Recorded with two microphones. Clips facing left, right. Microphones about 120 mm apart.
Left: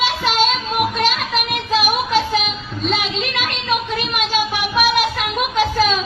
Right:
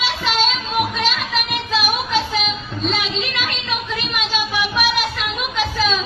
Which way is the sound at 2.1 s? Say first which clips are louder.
Left 3 dB; 45° left (ahead or behind).